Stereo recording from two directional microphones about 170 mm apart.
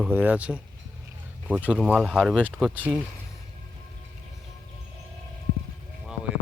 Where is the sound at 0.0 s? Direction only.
10° right (ahead or behind).